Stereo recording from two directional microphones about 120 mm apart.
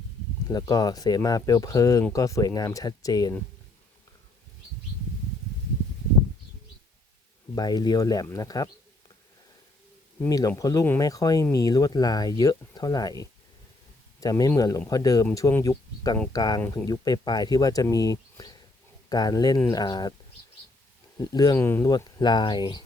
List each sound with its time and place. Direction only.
0.4 s speech: 35° left (ahead or behind)
7.5 s speech: 35° left (ahead or behind)
10.2 s speech: 30° left (ahead or behind)
21.2 s speech: 30° left (ahead or behind)
21.6 s speech: 20° left (ahead or behind)
21.8 s speech: 35° left (ahead or behind)